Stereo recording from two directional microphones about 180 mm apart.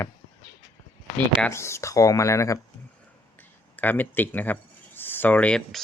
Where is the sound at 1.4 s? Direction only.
15° left (ahead or behind).